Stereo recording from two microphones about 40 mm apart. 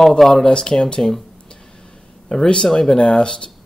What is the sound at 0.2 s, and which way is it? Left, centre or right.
Speech, centre.